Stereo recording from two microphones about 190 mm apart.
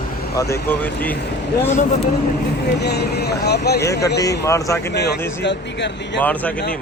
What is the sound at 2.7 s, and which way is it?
Speech, 60° left (ahead or behind).